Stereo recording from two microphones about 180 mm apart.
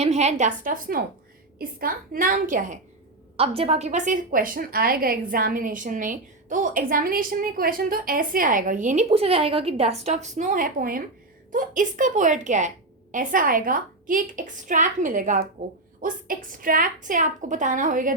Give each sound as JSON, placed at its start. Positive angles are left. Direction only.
{"t": 0.0, "sound": "a woman's voice", "side_deg": -40}
{"t": 3.3, "sound": "a woman's voice", "side_deg": -35}